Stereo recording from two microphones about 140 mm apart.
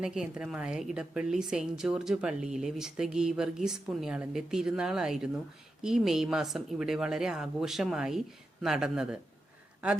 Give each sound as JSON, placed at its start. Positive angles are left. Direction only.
{"t": 0.0, "sound": "a woman's voice", "side_deg": -5}